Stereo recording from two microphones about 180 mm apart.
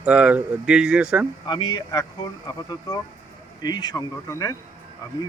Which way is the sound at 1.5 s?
25° left (ahead or behind).